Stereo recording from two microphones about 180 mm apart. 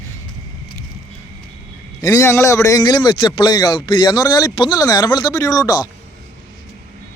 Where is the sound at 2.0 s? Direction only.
15° left (ahead or behind).